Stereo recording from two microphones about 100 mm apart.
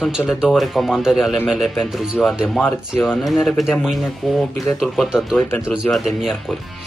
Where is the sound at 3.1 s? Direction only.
5° right (ahead or behind).